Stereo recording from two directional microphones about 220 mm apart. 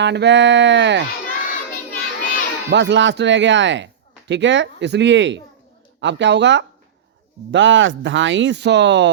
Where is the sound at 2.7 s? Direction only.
50° right (ahead or behind).